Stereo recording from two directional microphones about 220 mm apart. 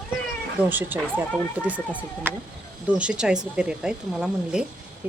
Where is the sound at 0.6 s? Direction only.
10° right (ahead or behind).